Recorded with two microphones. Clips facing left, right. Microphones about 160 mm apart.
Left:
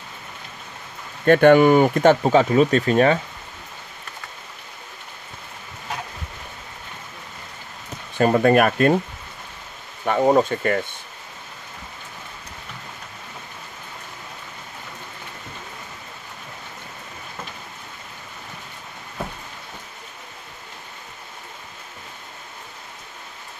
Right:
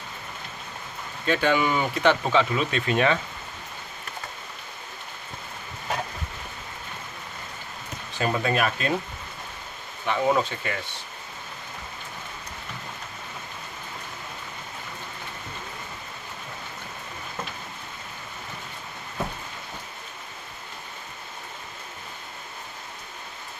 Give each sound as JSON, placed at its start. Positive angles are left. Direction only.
{"t": 1.2, "sound": "speech", "side_deg": 55}
{"t": 8.2, "sound": "speech", "side_deg": 50}
{"t": 10.0, "sound": "speech", "side_deg": 45}